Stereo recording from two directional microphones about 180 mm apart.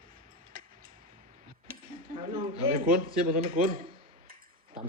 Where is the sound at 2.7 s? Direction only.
55° right (ahead or behind).